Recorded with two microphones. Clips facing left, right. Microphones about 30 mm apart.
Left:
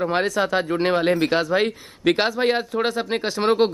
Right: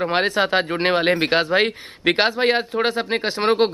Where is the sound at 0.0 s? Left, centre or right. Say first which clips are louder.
Right 2 dB; right.